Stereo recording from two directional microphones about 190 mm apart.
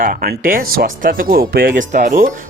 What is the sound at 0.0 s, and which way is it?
Speech, 50° right (ahead or behind).